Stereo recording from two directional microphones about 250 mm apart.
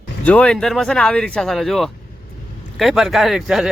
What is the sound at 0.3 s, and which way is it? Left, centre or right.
Speech, centre.